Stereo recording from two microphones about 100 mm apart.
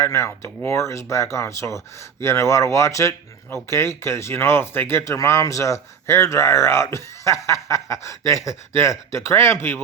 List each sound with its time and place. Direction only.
0.0 s speech: 30° left (ahead or behind)